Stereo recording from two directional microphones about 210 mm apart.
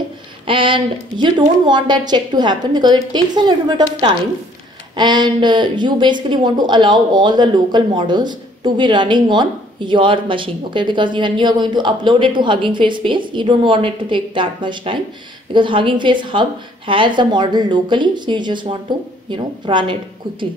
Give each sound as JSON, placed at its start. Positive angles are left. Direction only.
{"t": 0.5, "sound": "speech", "side_deg": -25}